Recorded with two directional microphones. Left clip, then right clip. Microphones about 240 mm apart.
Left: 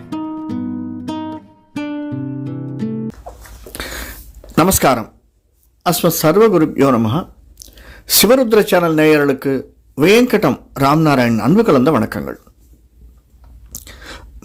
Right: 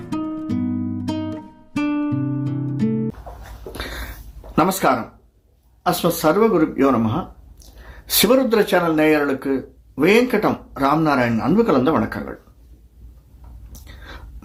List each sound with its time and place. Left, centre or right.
0.4 s music: centre
3.8 s a sound: left
4.5 s speech: left
13.8 s chewing: left